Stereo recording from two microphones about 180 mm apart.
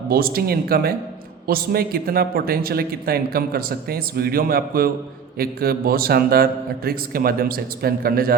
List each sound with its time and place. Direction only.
0.1 s a man's voice: 55° right (ahead or behind)